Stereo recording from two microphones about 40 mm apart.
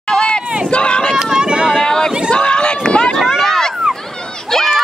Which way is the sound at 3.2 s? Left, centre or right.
Centre.